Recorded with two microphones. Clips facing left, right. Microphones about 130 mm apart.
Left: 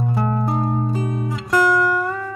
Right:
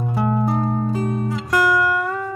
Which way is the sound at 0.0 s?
5° right (ahead or behind).